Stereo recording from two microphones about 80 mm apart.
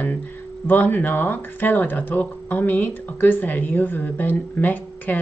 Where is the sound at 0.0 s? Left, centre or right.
Left.